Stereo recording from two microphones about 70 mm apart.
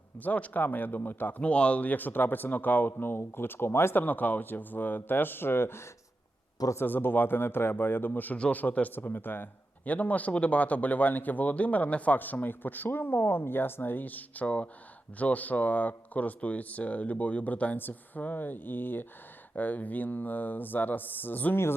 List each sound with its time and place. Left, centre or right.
0.2 s a man's voice: left